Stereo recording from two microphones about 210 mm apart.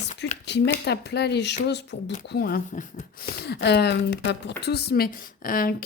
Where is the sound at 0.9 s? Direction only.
50° left (ahead or behind).